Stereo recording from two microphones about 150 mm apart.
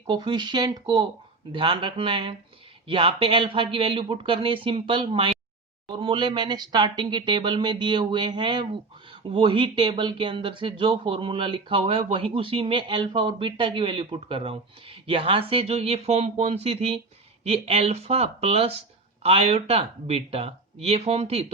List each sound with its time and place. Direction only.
0.1 s speech: 30° right (ahead or behind)